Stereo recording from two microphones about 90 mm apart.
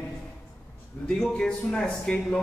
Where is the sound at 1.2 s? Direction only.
10° left (ahead or behind).